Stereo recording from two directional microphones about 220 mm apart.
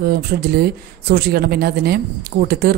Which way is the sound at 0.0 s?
45° right (ahead or behind).